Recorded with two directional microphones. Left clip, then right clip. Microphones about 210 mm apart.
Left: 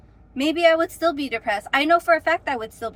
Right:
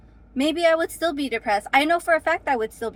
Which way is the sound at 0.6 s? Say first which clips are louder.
Left 3 dB; 25° right (ahead or behind).